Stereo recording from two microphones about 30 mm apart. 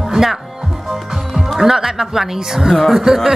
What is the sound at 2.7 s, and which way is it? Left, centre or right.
Speech, centre.